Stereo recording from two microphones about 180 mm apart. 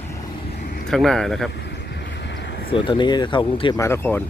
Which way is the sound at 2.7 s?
25° left (ahead or behind).